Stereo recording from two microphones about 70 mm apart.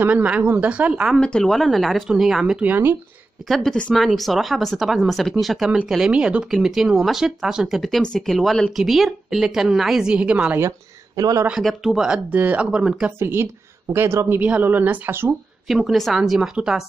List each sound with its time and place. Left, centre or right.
0.0 s a woman's voice: right
1.2 s a woman's voice: centre
2.6 s speech: right
3.4 s a woman's voice: centre
11.1 s speech: right
11.6 s a woman's voice: centre
13.2 s speech: right
14.4 s speech: right
15.6 s a woman's voice: centre